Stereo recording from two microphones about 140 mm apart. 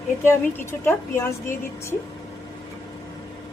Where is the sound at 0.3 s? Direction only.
20° left (ahead or behind).